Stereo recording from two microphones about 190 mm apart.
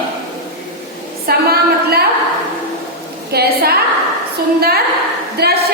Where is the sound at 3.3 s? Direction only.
55° right (ahead or behind).